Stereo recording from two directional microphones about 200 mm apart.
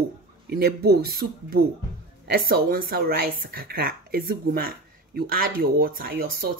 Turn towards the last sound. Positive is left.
turn(degrees=-50)  # may be behind; listen again after turning